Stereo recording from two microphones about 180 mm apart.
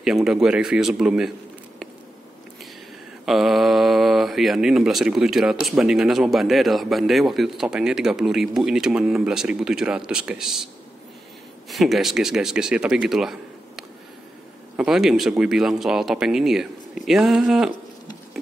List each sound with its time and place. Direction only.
0.0 s speech: 5° right (ahead or behind)
3.3 s speech: centre (ahead or behind)
11.7 s speech: centre (ahead or behind)